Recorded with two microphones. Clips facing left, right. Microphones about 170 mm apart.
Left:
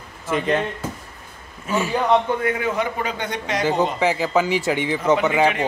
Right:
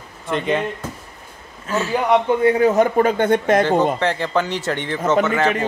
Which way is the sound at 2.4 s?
35° right (ahead or behind).